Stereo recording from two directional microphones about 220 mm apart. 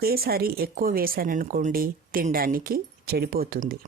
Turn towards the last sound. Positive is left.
turn(degrees=-40)  # may be behind; listen again after turning